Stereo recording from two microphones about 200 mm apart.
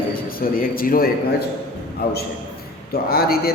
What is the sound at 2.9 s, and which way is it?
Speech, 50° left (ahead or behind).